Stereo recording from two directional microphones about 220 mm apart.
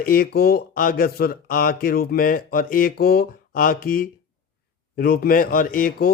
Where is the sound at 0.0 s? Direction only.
45° left (ahead or behind).